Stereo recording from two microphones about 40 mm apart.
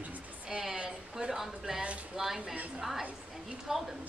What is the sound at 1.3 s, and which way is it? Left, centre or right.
A woman's voice, centre.